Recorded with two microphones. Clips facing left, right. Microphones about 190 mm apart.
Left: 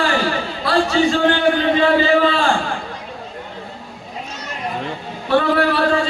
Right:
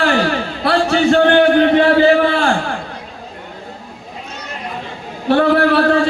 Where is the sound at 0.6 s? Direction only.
65° right (ahead or behind).